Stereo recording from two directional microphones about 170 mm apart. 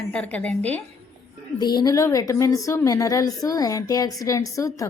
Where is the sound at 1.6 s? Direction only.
25° left (ahead or behind).